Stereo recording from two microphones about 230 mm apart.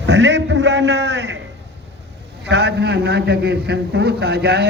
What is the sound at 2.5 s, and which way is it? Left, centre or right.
A man's voice, right.